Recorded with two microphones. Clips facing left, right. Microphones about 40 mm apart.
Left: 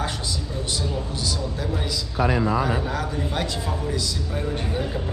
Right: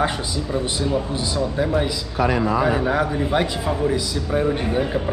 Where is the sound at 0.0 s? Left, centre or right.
Right.